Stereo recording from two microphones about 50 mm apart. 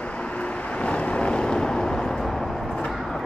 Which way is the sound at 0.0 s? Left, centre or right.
Left.